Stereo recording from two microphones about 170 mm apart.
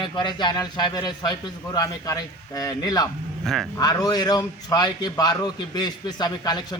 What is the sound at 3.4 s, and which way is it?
Speech, centre (ahead or behind).